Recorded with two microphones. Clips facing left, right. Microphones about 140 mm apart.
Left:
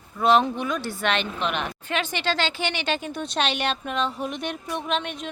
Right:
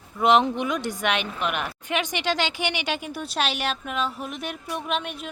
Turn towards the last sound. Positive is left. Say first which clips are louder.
# left 1 dB
turn(degrees=-5)  # may be behind; listen again after turning